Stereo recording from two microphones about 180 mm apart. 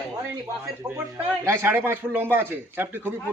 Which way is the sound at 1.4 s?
15° right (ahead or behind).